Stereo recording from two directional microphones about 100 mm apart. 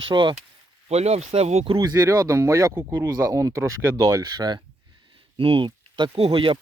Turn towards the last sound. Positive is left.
turn(degrees=-60)  # may be behind; listen again after turning